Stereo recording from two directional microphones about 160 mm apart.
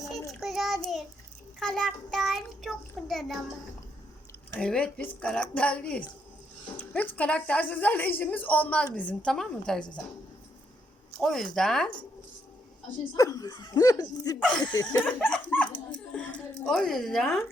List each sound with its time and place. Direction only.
0.3 s child singing: centre (ahead or behind)
1.5 s speech: 5° left (ahead or behind)
4.5 s a woman's voice: 5° left (ahead or behind)
11.2 s speech: centre (ahead or behind)
13.1 s speech: 25° left (ahead or behind)
14.3 s speech: 5° left (ahead or behind)
14.6 s speech: 25° left (ahead or behind)
15.4 s speech: 10° left (ahead or behind)